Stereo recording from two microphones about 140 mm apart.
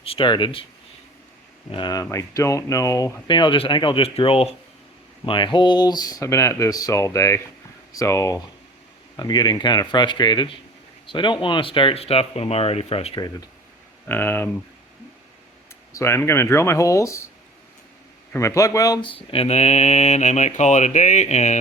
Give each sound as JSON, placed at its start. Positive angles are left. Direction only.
{"t": 0.0, "sound": "speech", "side_deg": 40}
{"t": 1.7, "sound": "speech", "side_deg": 30}
{"t": 11.0, "sound": "mantra", "side_deg": 35}
{"t": 14.1, "sound": "speech", "side_deg": 15}
{"t": 15.9, "sound": "speech", "side_deg": 20}
{"t": 18.3, "sound": "speech", "side_deg": 20}
{"t": 19.0, "sound": "mantra", "side_deg": 40}